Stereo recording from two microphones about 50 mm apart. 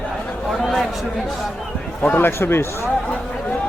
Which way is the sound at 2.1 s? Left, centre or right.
Left.